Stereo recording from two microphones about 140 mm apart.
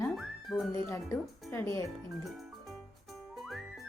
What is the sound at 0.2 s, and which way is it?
Music, centre (ahead or behind).